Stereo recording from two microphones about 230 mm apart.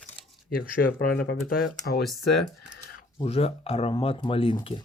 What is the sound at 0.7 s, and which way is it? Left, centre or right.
Speech, left.